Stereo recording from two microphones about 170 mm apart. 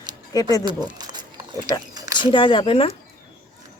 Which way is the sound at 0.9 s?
25° right (ahead or behind).